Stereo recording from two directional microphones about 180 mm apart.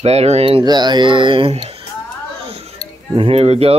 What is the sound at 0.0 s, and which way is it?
Speech, 35° right (ahead or behind).